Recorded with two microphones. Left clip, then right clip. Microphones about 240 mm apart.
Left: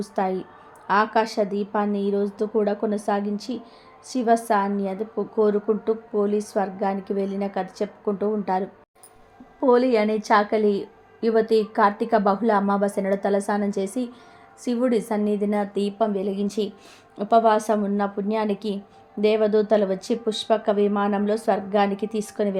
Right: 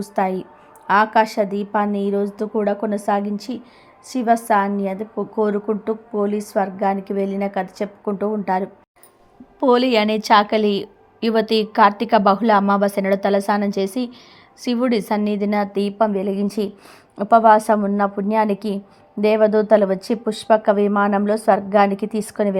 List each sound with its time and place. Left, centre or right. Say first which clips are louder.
0.0 s a woman's voice: right 4 dB; right